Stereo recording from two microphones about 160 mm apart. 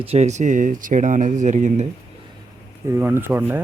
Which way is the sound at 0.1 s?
45° right (ahead or behind).